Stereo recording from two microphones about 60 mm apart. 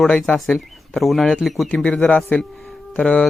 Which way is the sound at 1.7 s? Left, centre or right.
Centre.